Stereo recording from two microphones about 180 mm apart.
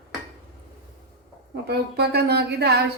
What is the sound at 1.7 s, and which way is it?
Speech, 65° right (ahead or behind).